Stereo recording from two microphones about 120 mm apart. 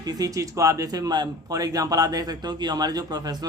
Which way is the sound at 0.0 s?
30° right (ahead or behind).